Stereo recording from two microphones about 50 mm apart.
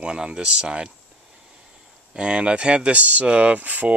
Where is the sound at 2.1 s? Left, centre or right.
Right.